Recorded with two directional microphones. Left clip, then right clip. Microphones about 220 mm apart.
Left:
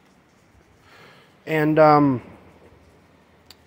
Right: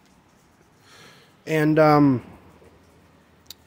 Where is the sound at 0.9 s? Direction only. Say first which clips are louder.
Even; 20° right (ahead or behind).